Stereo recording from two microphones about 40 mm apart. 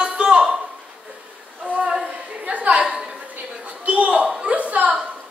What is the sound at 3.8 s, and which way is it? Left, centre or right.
Chuckle, right.